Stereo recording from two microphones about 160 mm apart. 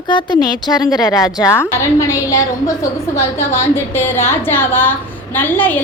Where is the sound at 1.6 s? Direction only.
15° left (ahead or behind).